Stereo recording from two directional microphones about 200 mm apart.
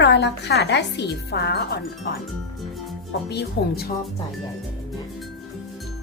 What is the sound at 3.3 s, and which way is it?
Speech, 55° left (ahead or behind).